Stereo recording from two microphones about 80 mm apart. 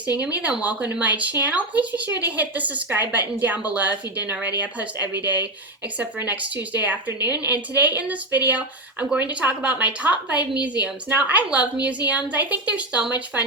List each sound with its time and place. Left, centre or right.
0.6 s a woman's voice: right